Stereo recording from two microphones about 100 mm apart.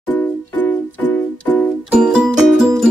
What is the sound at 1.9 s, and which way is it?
Music, 5° right (ahead or behind).